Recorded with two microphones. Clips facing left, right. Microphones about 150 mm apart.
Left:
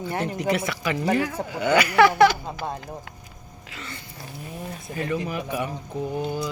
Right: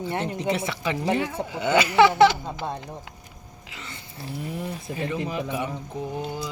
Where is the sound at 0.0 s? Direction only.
25° right (ahead or behind).